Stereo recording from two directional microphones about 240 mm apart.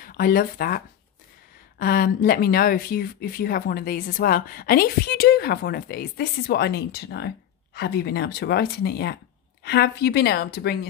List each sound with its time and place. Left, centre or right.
0.0 s a woman's voice: left